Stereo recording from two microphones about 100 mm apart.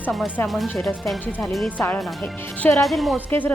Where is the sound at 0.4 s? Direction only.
Centre (ahead or behind).